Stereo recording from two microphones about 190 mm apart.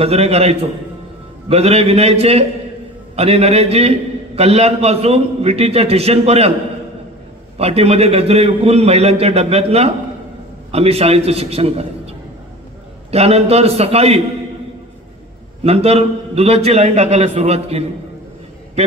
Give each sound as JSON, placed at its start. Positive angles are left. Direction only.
{"t": 0.0, "sound": "a man's voice", "side_deg": -35}
{"t": 7.5, "sound": "a man's voice", "side_deg": -35}
{"t": 15.6, "sound": "a man's voice", "side_deg": -30}